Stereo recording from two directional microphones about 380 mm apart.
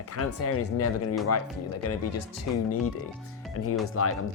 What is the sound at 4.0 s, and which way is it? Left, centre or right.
Speech, left.